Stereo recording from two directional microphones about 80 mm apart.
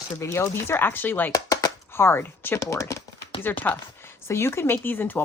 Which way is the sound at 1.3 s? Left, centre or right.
Left.